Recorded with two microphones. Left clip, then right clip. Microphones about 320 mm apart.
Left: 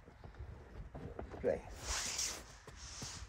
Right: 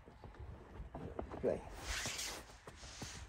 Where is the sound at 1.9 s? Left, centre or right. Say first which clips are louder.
Left 2 dB; centre.